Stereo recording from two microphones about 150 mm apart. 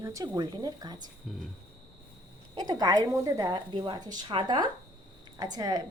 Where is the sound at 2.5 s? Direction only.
25° right (ahead or behind).